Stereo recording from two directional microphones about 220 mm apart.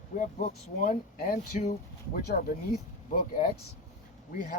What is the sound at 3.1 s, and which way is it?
Speech, 40° left (ahead or behind).